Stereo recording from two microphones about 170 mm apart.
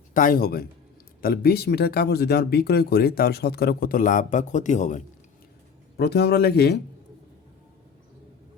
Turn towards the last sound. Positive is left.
turn(degrees=70)  # may be behind; listen again after turning